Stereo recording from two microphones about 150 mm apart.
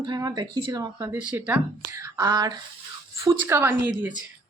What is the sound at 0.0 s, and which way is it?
A woman's voice, 25° right (ahead or behind).